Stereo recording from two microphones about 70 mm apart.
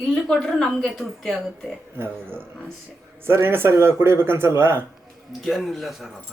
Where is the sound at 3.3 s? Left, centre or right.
Right.